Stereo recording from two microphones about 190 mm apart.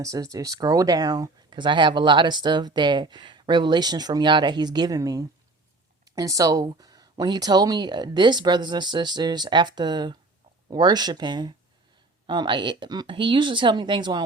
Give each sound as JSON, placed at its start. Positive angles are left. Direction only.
{"t": 0.0, "sound": "speech", "side_deg": -15}